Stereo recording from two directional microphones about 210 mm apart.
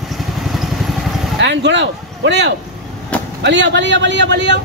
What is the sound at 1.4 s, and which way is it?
Speech, 55° right (ahead or behind).